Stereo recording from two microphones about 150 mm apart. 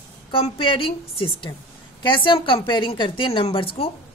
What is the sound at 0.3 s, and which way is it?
Speech, 35° left (ahead or behind).